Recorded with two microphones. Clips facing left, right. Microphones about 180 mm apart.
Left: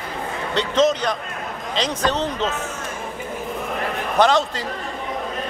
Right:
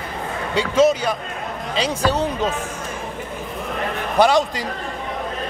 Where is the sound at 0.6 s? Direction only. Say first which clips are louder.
Right 2 dB; 10° right (ahead or behind).